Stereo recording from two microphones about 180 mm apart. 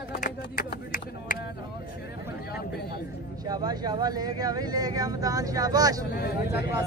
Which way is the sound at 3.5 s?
20° right (ahead or behind).